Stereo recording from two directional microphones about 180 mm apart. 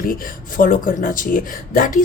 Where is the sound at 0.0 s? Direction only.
50° left (ahead or behind).